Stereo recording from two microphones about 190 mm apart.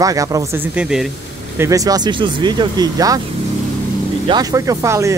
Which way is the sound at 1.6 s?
20° right (ahead or behind).